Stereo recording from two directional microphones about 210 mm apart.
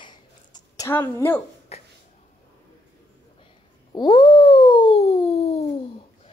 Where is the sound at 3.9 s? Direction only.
20° left (ahead or behind).